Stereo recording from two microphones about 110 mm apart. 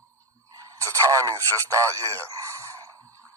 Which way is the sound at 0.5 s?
30° right (ahead or behind).